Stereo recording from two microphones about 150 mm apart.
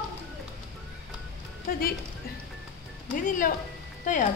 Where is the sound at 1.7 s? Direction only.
75° left (ahead or behind).